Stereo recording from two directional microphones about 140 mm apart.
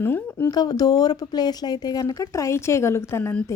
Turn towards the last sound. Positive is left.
turn(degrees=20)  # may be behind; listen again after turning